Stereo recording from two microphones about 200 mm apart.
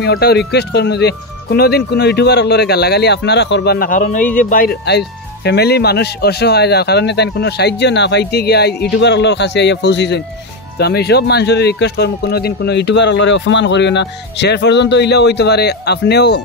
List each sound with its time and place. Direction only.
0.0 s speech: 55° left (ahead or behind)